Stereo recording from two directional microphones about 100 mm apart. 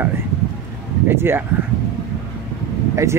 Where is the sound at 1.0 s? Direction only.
25° right (ahead or behind).